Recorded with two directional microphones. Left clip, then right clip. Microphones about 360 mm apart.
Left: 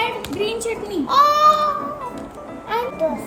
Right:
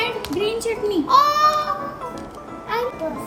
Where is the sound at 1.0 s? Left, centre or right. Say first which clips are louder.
Left 2 dB; centre.